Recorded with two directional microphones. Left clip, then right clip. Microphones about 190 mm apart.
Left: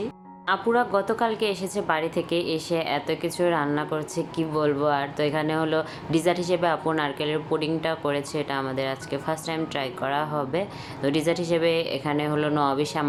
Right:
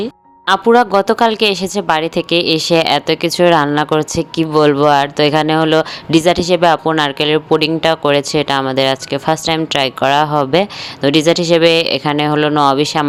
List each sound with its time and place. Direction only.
0.0 s a woman's voice: 50° right (ahead or behind)